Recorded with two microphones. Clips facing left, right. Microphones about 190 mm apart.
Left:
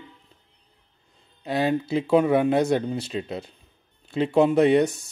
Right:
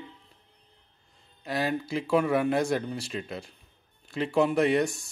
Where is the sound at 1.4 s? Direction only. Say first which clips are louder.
Left 6 dB; 25° left (ahead or behind).